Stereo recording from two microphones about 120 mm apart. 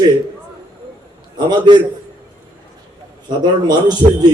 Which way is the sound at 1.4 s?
35° right (ahead or behind).